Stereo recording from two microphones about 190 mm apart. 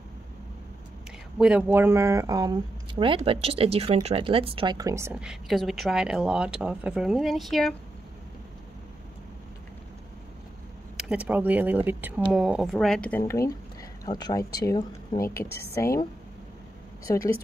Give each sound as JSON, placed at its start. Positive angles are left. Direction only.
{"t": 1.4, "sound": "speech", "side_deg": -10}
{"t": 5.1, "sound": "speech", "side_deg": -5}
{"t": 11.0, "sound": "speech", "side_deg": -5}
{"t": 14.0, "sound": "speech", "side_deg": 20}